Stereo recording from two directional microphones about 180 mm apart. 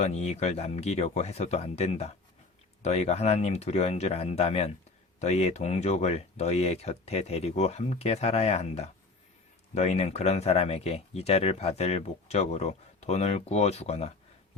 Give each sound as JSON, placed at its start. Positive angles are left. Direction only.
{"t": 0.0, "sound": "speech", "side_deg": 40}